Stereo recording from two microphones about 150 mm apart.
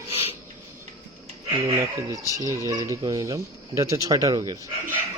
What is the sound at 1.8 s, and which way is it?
Speech, 20° right (ahead or behind).